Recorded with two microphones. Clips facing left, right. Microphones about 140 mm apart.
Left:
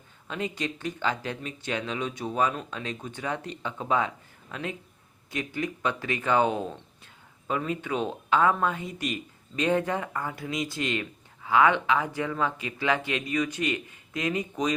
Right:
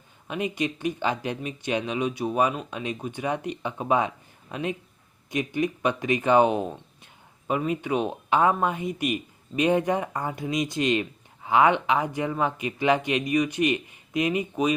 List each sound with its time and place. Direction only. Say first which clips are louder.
0.3 s speech: right 4 dB; 15° right (ahead or behind)